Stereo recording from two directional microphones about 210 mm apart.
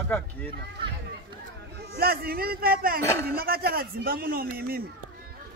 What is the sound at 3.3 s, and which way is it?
Speech, 45° right (ahead or behind).